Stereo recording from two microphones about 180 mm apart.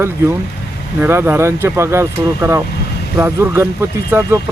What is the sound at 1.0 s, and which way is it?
Speech, 10° right (ahead or behind).